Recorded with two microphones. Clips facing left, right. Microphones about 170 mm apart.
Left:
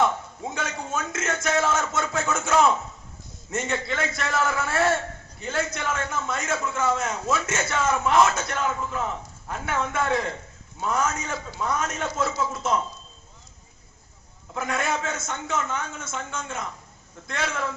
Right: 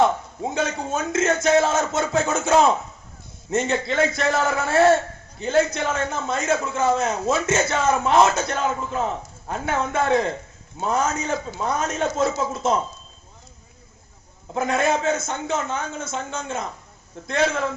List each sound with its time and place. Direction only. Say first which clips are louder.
0.0 s a man's voice: right 4 dB; 35° right (ahead or behind)
5.4 s a man's voice: right 8 dB; 25° right (ahead or behind)
14.5 s a man's voice: right 6 dB; 35° right (ahead or behind)